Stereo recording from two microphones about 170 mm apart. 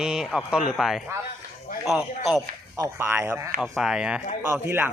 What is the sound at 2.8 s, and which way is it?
Speech, 15° right (ahead or behind).